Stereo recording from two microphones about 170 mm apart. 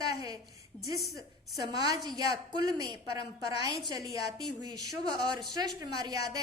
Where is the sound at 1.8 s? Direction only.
25° right (ahead or behind).